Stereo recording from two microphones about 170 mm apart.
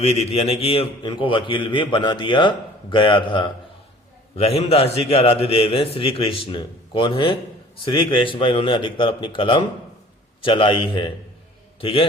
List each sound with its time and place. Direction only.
0.0 s a man's voice: 35° left (ahead or behind)